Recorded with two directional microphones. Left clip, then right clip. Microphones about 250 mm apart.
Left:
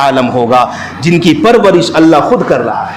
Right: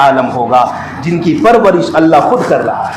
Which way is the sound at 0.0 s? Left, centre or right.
Left.